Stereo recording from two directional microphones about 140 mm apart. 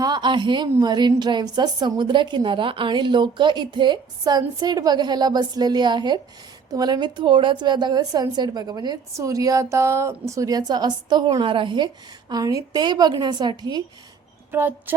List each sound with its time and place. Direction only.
0.0 s a woman's voice: 30° right (ahead or behind)
14.5 s speech: 15° right (ahead or behind)